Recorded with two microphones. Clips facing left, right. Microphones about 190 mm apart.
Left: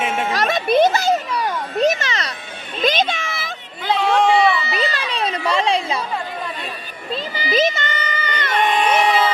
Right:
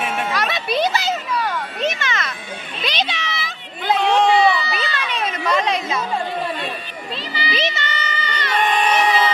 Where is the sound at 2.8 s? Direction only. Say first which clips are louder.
Left 6 dB; 45° left (ahead or behind).